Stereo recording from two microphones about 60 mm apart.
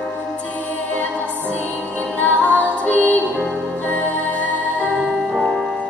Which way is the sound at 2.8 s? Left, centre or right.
Left.